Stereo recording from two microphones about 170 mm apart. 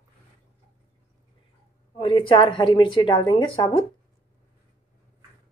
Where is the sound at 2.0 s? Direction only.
30° left (ahead or behind).